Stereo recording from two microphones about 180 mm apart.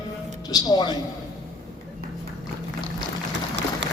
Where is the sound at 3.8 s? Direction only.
75° right (ahead or behind).